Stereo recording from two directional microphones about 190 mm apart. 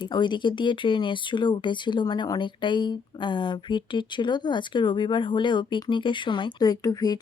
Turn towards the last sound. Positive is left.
turn(degrees=20)  # may be behind; listen again after turning